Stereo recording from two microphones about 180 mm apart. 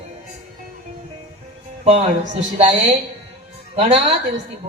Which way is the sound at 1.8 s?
40° right (ahead or behind).